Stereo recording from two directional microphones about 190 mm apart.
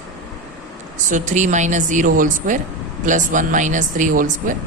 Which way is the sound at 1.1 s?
40° right (ahead or behind).